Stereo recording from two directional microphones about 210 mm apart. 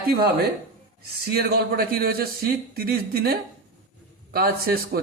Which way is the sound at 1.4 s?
50° right (ahead or behind).